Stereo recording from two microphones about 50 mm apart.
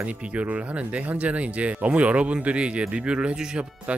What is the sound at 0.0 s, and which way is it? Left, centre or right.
Speech, right.